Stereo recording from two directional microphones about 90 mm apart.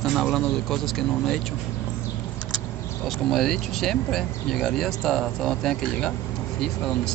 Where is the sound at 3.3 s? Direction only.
5° left (ahead or behind).